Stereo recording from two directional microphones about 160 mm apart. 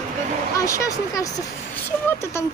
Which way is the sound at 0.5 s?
20° left (ahead or behind).